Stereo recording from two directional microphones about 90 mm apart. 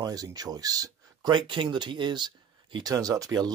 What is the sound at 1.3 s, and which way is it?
Speech, 65° right (ahead or behind).